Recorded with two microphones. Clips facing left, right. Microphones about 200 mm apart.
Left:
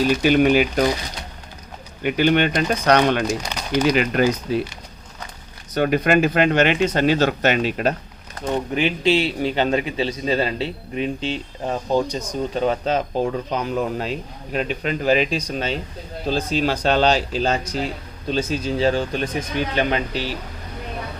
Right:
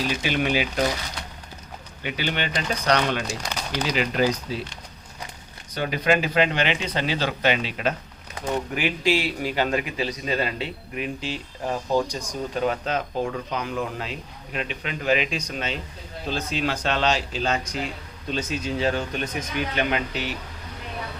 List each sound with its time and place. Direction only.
0.2 s speech: 45° left (ahead or behind)
2.0 s speech: 50° left (ahead or behind)
5.7 s speech: 50° left (ahead or behind)
8.5 s a man's voice: 25° left (ahead or behind)